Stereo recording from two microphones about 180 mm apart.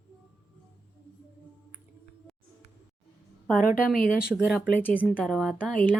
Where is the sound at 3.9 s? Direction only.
5° right (ahead or behind).